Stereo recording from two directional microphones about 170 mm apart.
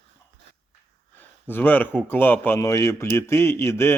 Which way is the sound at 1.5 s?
10° left (ahead or behind).